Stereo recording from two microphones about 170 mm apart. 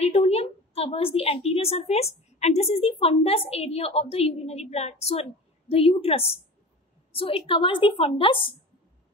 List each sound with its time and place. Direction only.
0.0 s a woman's voice: 35° left (ahead or behind)